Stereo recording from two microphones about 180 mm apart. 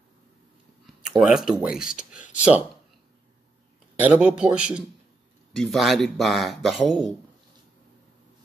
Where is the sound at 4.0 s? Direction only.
5° right (ahead or behind).